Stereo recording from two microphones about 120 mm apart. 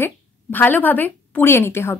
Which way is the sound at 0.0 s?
15° left (ahead or behind).